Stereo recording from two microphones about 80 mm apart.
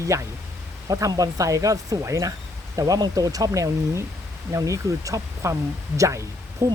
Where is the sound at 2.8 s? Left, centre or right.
Right.